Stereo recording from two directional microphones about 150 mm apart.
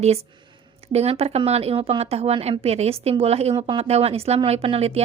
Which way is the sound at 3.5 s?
30° right (ahead or behind).